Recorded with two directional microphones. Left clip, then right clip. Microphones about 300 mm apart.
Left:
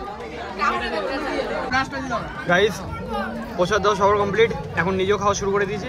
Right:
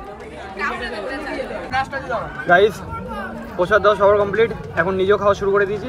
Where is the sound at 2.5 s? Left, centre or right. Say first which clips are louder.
Right 5 dB; centre.